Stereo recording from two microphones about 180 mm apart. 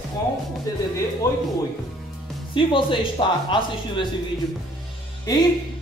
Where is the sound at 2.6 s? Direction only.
25° left (ahead or behind).